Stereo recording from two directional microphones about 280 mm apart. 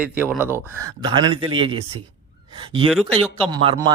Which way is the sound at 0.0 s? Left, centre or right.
Centre.